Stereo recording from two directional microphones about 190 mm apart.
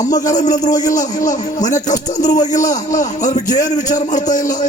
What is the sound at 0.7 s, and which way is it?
Speech, 20° left (ahead or behind).